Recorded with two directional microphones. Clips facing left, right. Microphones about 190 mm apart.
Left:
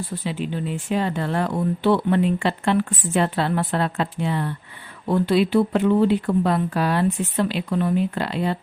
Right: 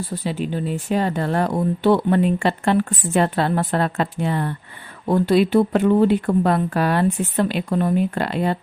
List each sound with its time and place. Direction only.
0.3 s speech: 40° right (ahead or behind)